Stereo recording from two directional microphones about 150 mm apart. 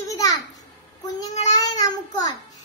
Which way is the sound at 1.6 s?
25° left (ahead or behind).